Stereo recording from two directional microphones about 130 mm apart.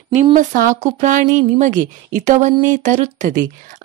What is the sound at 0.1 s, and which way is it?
A woman's voice, 65° right (ahead or behind).